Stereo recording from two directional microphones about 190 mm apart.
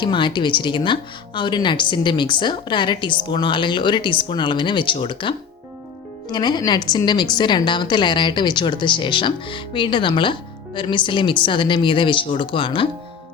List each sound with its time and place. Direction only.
0.0 s speech: 25° left (ahead or behind)